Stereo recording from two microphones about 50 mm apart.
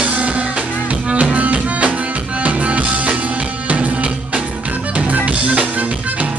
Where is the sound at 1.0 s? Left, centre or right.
Centre.